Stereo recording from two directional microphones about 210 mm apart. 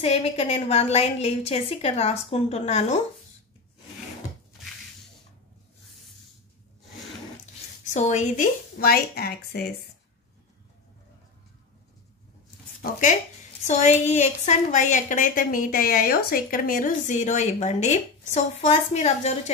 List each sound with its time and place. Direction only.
0.0 s a woman's voice: 30° left (ahead or behind)
7.8 s speech: 35° left (ahead or behind)
12.8 s a woman's voice: 40° left (ahead or behind)